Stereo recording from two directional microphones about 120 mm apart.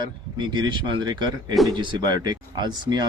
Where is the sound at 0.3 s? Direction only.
35° right (ahead or behind).